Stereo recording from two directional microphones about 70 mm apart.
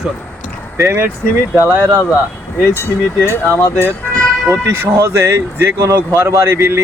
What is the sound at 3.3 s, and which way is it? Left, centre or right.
Speech, left.